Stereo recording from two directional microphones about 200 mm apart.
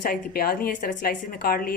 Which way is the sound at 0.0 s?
45° left (ahead or behind).